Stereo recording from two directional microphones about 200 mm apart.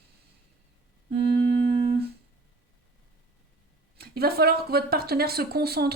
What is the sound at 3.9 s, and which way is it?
Speech, 50° right (ahead or behind).